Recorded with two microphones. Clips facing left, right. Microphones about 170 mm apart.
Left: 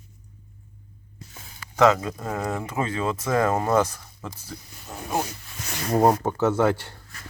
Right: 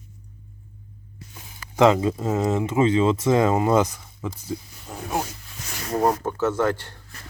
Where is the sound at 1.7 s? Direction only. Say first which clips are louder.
Right 2 dB; 25° right (ahead or behind).